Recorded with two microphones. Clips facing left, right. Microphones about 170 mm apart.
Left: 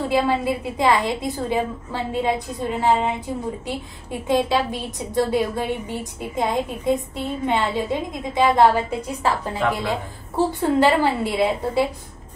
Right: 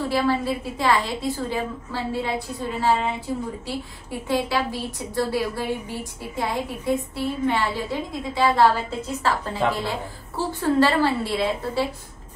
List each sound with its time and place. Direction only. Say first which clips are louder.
0.0 s a woman's voice: left 2 dB; 20° left (ahead or behind)